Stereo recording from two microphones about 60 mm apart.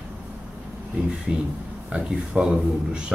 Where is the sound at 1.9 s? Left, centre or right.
Centre.